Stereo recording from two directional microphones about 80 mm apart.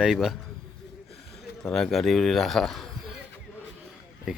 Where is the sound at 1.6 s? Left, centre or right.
Centre.